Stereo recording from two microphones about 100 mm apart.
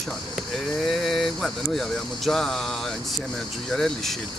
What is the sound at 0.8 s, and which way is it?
Speech, centre (ahead or behind).